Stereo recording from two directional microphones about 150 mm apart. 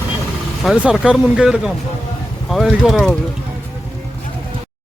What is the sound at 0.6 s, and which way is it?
Speech, centre (ahead or behind).